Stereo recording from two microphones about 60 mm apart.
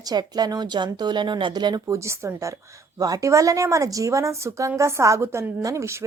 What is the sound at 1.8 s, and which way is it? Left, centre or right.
A woman's voice, right.